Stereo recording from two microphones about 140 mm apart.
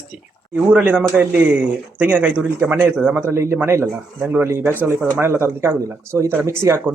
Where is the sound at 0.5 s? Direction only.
10° right (ahead or behind).